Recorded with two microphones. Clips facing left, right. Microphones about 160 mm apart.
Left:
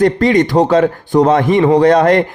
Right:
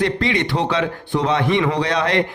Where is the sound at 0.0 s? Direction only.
45° left (ahead or behind).